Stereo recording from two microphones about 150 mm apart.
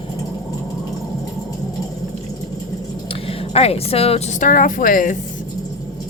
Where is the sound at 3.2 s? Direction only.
45° left (ahead or behind).